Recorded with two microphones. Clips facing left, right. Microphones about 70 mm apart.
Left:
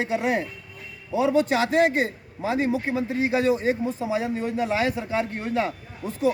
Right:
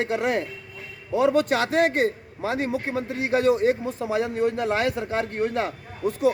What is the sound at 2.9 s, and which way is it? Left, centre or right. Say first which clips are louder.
Speech: right 2 dB; right.